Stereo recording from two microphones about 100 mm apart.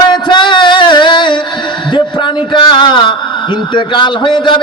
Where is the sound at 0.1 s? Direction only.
50° left (ahead or behind).